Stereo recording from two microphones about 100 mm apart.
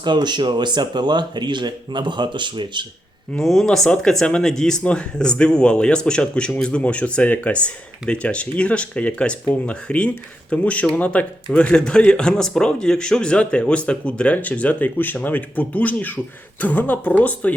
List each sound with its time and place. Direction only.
0.0 s speech: 45° right (ahead or behind)
3.3 s a man's voice: 5° left (ahead or behind)